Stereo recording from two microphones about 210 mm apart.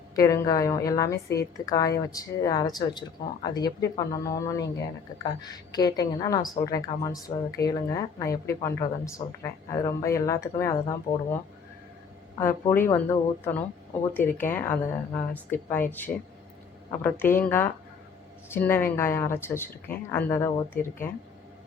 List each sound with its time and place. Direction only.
0.2 s a woman's voice: 15° left (ahead or behind)
12.4 s a woman's voice: 10° left (ahead or behind)